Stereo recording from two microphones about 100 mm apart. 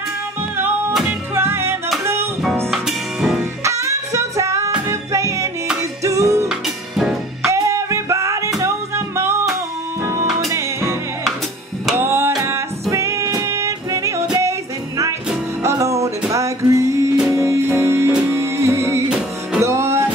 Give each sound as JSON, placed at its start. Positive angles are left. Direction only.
{"t": 1.3, "sound": "music", "side_deg": -25}
{"t": 2.7, "sound": "music", "side_deg": -5}
{"t": 3.6, "sound": "music", "side_deg": -30}
{"t": 6.5, "sound": "music", "side_deg": -5}
{"t": 7.5, "sound": "music", "side_deg": -30}
{"t": 10.5, "sound": "music", "side_deg": -25}
{"t": 12.0, "sound": "music", "side_deg": -25}
{"t": 15.6, "sound": "music", "side_deg": -30}